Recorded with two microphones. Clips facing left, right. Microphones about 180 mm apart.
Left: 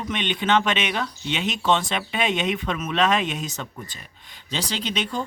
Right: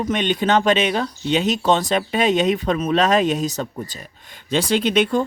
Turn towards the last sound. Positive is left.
turn(degrees=-55)  # may be behind; listen again after turning